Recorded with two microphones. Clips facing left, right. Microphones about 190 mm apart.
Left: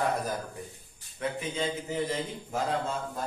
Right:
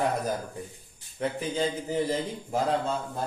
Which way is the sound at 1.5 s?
35° right (ahead or behind).